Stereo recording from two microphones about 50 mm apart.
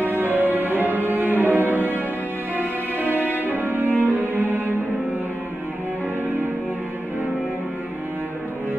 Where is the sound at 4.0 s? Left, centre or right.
Right.